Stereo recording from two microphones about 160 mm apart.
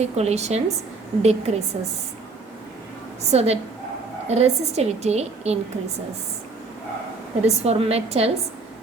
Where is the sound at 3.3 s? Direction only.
40° right (ahead or behind).